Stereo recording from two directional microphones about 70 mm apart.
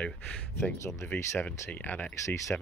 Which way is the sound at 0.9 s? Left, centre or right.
Centre.